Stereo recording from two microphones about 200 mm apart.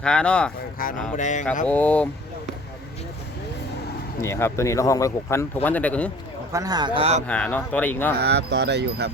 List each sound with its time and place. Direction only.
0.0 s speech: 5° left (ahead or behind)
0.8 s speech: 45° left (ahead or behind)
1.1 s a sound: 40° left (ahead or behind)
1.6 s speech: 5° left (ahead or behind)
4.2 s speech: 15° left (ahead or behind)
6.5 s speech: 20° right (ahead or behind)
7.3 s speech: 5° left (ahead or behind)
8.2 s speech: 55° right (ahead or behind)